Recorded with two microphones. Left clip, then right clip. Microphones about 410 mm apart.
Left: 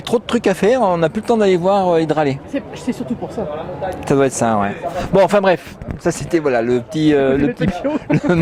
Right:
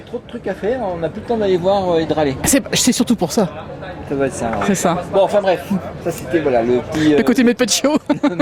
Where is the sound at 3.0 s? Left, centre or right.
Right.